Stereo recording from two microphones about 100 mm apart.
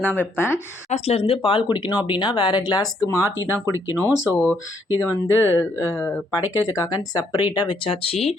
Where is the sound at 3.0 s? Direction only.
35° left (ahead or behind).